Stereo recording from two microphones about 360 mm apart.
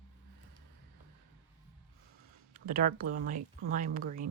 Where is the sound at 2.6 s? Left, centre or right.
Right.